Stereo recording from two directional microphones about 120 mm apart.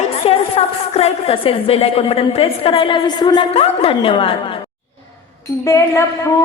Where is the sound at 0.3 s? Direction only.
55° left (ahead or behind); by 3.4 s 40° left (ahead or behind).